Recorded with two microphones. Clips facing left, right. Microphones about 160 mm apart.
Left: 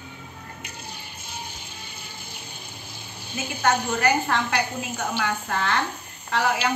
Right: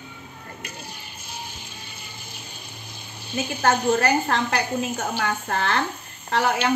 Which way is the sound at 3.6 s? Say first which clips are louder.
Right 2 dB; 35° right (ahead or behind).